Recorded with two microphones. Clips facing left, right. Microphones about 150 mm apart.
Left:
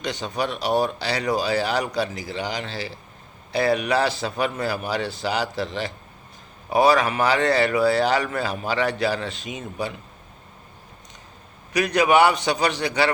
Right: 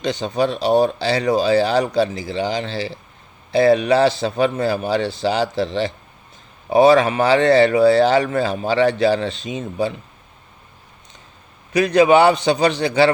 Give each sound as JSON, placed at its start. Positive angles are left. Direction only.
{"t": 0.0, "sound": "a man's voice", "side_deg": -25}
{"t": 11.7, "sound": "a man's voice", "side_deg": -25}